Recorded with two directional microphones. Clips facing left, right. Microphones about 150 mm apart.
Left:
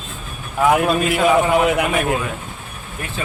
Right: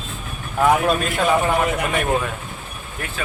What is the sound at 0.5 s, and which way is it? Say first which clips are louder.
Speech: left 1 dB; 5° left (ahead or behind).